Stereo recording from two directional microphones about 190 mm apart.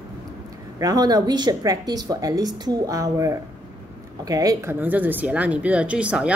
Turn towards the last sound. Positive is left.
turn(degrees=-5)  # may be behind; listen again after turning